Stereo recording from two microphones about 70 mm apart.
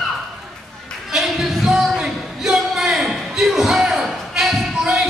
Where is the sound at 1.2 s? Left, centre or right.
Centre.